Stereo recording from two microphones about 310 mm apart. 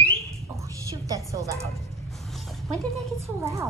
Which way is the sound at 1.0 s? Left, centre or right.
Centre.